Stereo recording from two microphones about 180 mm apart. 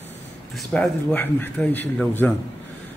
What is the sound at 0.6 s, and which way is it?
Speech, 5° left (ahead or behind).